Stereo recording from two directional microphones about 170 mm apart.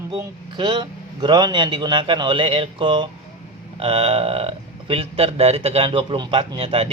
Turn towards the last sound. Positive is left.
turn(degrees=-35)  # may be behind; listen again after turning